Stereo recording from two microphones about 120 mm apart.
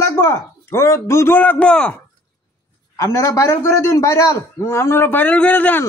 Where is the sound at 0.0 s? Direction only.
20° left (ahead or behind).